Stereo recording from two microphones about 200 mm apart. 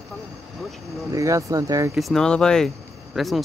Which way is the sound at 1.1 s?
15° right (ahead or behind).